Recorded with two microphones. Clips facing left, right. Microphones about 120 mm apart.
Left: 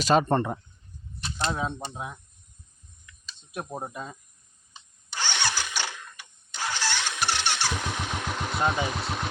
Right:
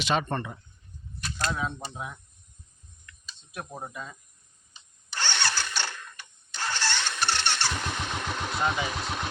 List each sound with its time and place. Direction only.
0.0 s speech: 40° left (ahead or behind)
1.2 s a sound: 25° left (ahead or behind)
3.5 s speech: 25° left (ahead or behind)
5.1 s engine starting: 10° left (ahead or behind)
6.5 s vehicle: 10° left (ahead or behind)